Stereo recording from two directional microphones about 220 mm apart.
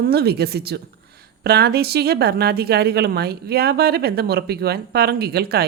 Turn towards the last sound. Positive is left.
turn(degrees=-45)  # may be behind; listen again after turning